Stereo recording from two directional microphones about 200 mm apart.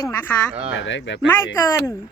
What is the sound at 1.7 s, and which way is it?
Speech, 15° left (ahead or behind).